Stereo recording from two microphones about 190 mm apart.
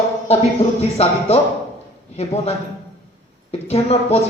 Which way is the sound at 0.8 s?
35° left (ahead or behind).